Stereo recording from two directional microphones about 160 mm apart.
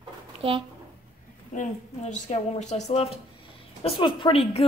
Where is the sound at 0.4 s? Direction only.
35° right (ahead or behind).